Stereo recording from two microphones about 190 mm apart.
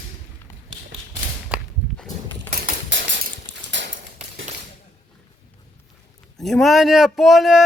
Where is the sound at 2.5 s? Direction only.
65° right (ahead or behind).